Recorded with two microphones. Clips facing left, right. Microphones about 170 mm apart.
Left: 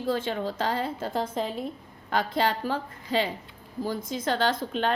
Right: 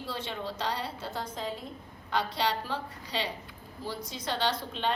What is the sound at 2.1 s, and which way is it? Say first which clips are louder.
A woman's voice: left 4 dB; 50° left (ahead or behind).